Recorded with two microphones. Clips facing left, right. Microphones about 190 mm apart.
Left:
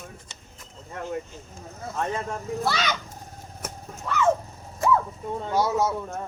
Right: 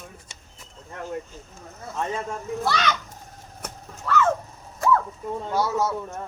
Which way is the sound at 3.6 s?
15° left (ahead or behind).